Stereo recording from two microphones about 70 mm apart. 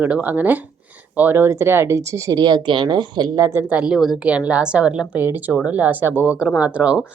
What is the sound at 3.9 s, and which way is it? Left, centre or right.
Speech, centre.